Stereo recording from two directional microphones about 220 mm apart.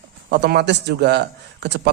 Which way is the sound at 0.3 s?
50° right (ahead or behind).